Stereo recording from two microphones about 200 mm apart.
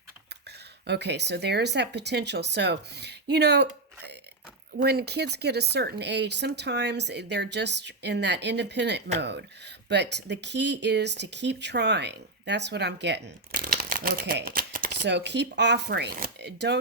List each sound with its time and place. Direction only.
0.3 s speech: 55° right (ahead or behind)